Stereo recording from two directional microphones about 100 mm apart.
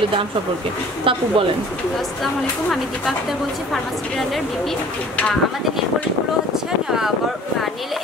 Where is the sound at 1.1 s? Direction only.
60° right (ahead or behind).